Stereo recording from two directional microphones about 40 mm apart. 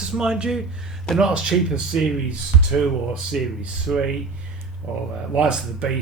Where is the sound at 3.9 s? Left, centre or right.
Centre.